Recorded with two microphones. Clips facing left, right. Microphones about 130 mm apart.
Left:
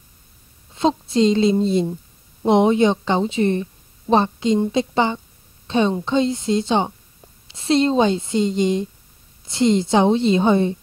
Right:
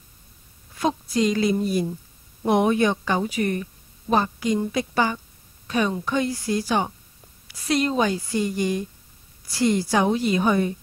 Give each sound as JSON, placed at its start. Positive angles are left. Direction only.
{"t": 0.7, "sound": "a woman's voice", "side_deg": 25}